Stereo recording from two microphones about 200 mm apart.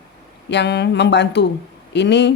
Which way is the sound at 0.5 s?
60° left (ahead or behind).